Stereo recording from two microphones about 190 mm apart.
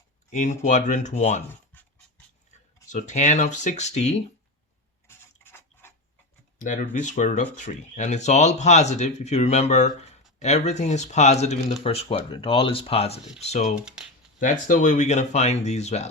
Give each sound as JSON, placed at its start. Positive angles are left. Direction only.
{"t": 0.3, "sound": "speech", "side_deg": 40}
{"t": 2.9, "sound": "speech", "side_deg": 40}
{"t": 5.0, "sound": "a sound", "side_deg": 10}
{"t": 6.6, "sound": "speech", "side_deg": 45}